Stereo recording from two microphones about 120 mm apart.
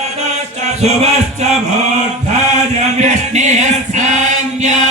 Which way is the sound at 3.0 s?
75° right (ahead or behind).